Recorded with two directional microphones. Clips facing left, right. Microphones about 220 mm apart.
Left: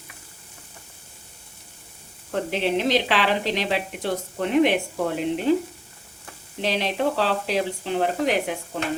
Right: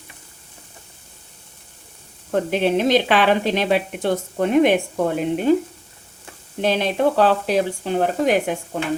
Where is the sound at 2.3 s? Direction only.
50° right (ahead or behind).